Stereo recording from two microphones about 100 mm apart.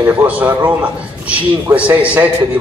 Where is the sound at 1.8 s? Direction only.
15° right (ahead or behind).